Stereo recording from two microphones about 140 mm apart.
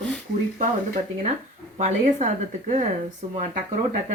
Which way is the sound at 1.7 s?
55° right (ahead or behind).